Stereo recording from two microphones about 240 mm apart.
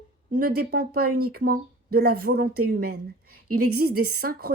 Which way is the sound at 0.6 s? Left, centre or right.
Right.